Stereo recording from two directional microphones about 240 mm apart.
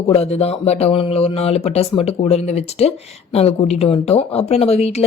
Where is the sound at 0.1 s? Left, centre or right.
Left.